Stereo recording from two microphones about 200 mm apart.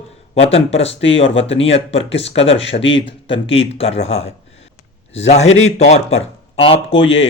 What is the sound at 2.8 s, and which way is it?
Speech, 65° left (ahead or behind).